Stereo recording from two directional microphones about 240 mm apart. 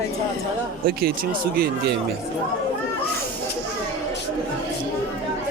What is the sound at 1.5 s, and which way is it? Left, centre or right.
Speech, right.